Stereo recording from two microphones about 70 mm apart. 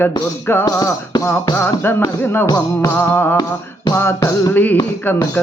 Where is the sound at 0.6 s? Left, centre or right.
Left.